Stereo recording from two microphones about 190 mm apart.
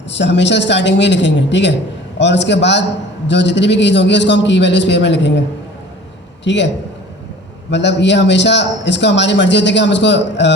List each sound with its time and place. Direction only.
0.1 s a man's voice: 70° left (ahead or behind)
6.4 s a man's voice: 70° left (ahead or behind)
7.7 s a man's voice: 65° left (ahead or behind)